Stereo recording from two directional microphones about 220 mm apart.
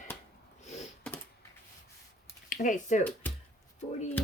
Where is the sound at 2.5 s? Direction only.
35° left (ahead or behind).